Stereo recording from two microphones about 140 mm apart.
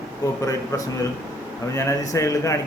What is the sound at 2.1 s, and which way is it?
Speech, 25° left (ahead or behind).